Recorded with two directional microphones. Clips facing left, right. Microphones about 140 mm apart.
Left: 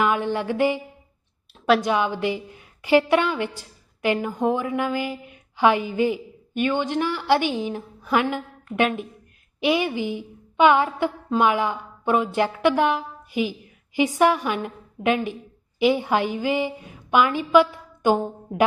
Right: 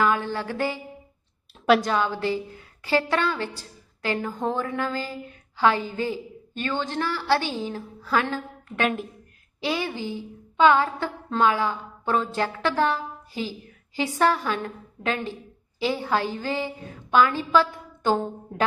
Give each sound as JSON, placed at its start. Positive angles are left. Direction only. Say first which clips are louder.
{"t": 0.0, "sound": "a sound", "louder": "left 2 dB", "side_deg": 20}
{"t": 1.8, "sound": "a woman's voice", "louder": "left 2 dB", "side_deg": 15}
{"t": 9.6, "sound": "a woman's voice", "louder": "left 6 dB", "side_deg": 15}